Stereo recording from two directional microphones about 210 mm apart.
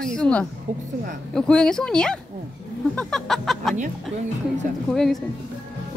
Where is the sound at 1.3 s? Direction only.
5° left (ahead or behind).